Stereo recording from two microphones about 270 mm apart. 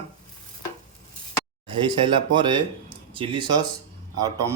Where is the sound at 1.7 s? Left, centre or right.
Centre.